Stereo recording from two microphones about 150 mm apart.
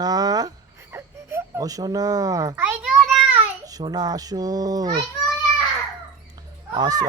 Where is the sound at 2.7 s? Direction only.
5° right (ahead or behind).